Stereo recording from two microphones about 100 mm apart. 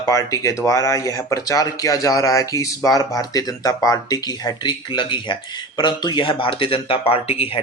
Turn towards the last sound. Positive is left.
turn(degrees=70)  # may be behind; listen again after turning